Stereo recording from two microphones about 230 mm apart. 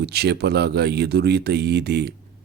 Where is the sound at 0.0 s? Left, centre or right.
Right.